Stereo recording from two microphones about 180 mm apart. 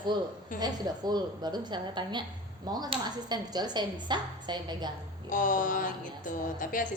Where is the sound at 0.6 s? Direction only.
25° right (ahead or behind).